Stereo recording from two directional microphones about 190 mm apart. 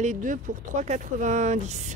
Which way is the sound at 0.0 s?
40° right (ahead or behind).